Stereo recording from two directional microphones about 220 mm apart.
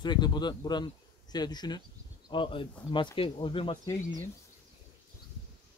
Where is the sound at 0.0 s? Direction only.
20° left (ahead or behind).